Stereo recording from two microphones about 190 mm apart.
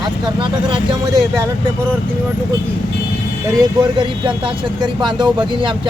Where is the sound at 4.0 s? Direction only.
25° right (ahead or behind).